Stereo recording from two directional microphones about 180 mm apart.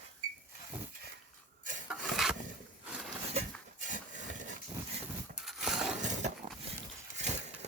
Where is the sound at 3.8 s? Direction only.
45° right (ahead or behind).